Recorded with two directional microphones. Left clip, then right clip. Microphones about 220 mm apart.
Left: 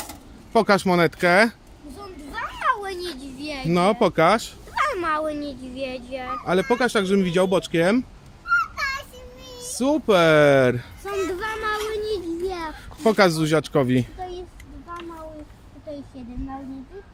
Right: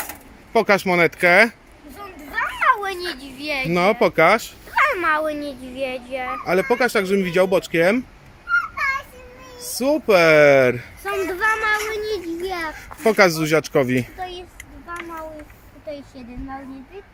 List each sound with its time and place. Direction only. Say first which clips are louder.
0.0 s a child's voice: right 4 dB; 5° left (ahead or behind)
9.6 s speech: right 2 dB; centre (ahead or behind)
11.0 s a sound: right 4 dB; 10° right (ahead or behind)
11.3 s child singing: right 7 dB; 15° right (ahead or behind)
13.0 s speech: right 2 dB; centre (ahead or behind)